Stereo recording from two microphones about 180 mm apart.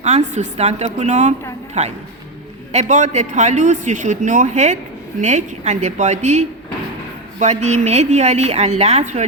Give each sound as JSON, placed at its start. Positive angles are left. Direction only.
{"t": 0.0, "sound": "a woman's voice", "side_deg": -40}